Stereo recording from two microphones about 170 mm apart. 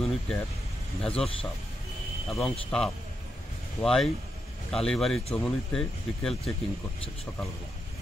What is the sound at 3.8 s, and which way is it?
Speech, centre (ahead or behind).